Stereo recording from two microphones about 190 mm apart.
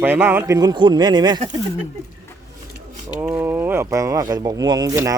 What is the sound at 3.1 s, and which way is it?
Speech, 10° right (ahead or behind).